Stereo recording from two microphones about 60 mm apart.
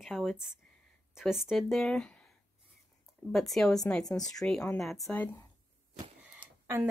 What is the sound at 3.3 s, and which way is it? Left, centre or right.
Speech, centre.